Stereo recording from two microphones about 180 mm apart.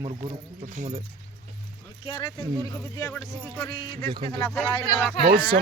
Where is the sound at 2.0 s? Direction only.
20° left (ahead or behind).